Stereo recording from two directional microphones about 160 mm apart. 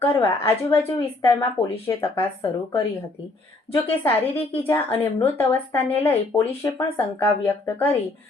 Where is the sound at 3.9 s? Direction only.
10° left (ahead or behind).